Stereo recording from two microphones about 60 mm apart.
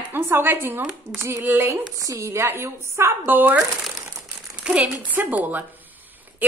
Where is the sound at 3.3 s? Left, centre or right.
Right.